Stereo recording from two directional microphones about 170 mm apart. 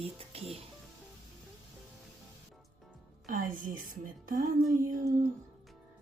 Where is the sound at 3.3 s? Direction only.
50° right (ahead or behind).